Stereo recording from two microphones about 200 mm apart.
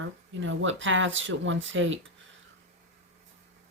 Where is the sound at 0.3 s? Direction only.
70° right (ahead or behind).